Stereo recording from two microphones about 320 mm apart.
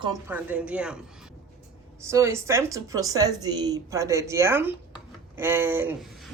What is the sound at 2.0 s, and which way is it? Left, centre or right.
A woman's voice, centre.